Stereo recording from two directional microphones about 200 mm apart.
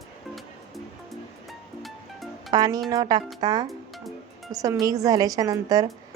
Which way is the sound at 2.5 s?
20° right (ahead or behind).